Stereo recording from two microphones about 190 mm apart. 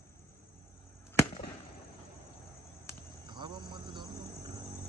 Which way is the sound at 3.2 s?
25° right (ahead or behind).